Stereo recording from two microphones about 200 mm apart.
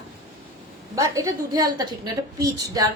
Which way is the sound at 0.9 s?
15° right (ahead or behind).